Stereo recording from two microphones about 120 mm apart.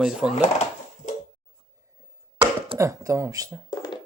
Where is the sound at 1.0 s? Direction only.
85° left.